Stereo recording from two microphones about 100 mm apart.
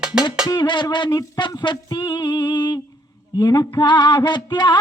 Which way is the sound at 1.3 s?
50° left (ahead or behind).